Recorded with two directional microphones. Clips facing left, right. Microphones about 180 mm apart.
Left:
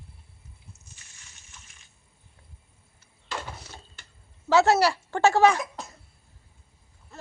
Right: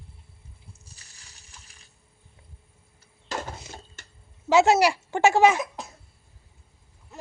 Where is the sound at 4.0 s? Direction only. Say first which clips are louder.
Right 3 dB; 45° right (ahead or behind).